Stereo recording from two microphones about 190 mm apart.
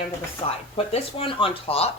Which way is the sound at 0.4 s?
30° left (ahead or behind).